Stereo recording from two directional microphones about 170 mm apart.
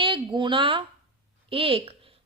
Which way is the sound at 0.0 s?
30° right (ahead or behind).